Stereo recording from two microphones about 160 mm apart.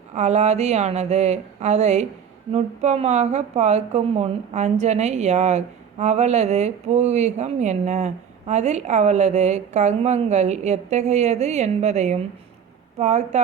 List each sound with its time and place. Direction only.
0.1 s a woman's voice: 45° right (ahead or behind)